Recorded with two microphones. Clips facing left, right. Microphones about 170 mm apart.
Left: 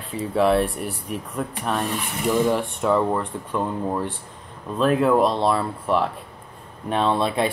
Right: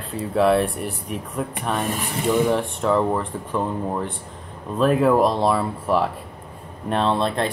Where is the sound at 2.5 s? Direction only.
Centre (ahead or behind).